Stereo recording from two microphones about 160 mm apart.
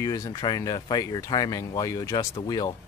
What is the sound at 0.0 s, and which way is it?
Speech, 20° left (ahead or behind).